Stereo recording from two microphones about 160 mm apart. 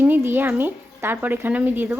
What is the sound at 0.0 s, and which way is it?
A woman's voice, 15° right (ahead or behind).